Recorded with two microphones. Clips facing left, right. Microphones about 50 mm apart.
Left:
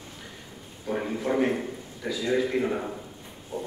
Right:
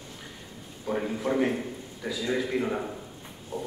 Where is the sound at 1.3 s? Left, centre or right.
Centre.